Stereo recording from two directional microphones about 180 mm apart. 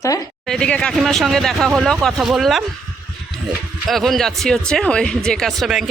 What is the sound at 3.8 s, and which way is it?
Speech, centre (ahead or behind).